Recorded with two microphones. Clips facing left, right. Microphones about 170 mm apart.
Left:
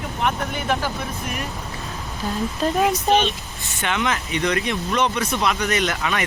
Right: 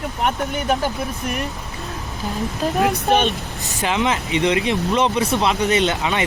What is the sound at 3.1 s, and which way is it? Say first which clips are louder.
Speech: right 2 dB; 55° right (ahead or behind).